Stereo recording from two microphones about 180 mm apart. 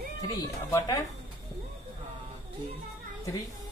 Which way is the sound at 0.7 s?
15° left (ahead or behind).